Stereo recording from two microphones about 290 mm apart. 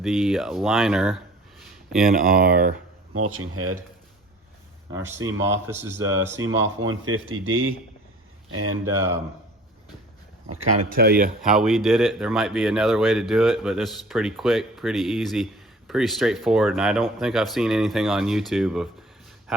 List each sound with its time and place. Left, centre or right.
0.0 s speech: centre
2.0 s speech: right
3.1 s speech: right
4.9 s speech: centre
7.0 s speech: right
8.9 s speech: centre
10.9 s speech: right
11.4 s speech: centre